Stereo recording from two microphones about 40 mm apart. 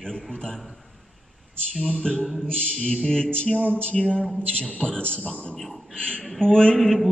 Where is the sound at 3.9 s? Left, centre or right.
Left.